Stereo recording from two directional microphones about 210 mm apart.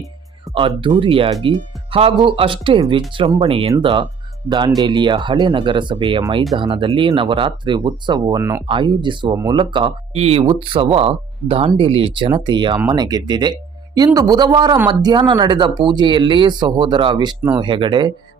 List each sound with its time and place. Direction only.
0.5 s speech: 25° right (ahead or behind)